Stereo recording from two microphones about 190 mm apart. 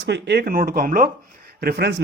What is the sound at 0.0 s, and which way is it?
Speech, 60° right (ahead or behind).